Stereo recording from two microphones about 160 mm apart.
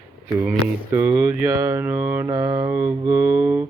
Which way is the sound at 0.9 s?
15° right (ahead or behind).